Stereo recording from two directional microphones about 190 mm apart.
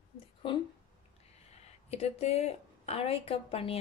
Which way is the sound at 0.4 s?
25° left (ahead or behind).